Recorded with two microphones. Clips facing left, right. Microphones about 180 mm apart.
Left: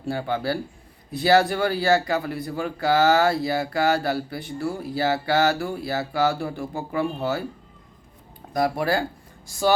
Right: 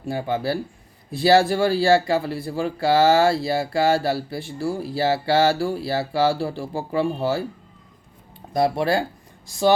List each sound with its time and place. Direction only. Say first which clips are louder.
0.0 s speech: right 1 dB; 20° right (ahead or behind)
8.5 s speech: right 2 dB; 25° right (ahead or behind)